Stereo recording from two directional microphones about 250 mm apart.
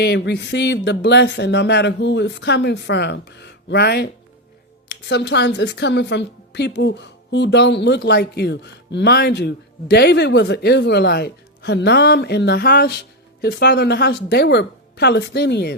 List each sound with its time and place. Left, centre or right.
0.0 s a woman's voice: left